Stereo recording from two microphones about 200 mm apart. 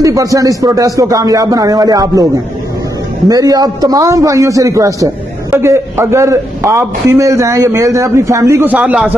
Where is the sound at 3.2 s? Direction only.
20° right (ahead or behind).